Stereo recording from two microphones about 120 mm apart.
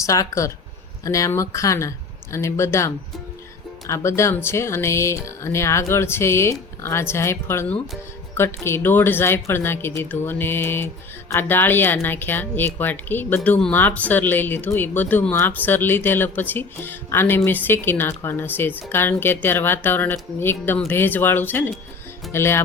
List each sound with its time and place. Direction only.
0.0 s speech: 25° left (ahead or behind)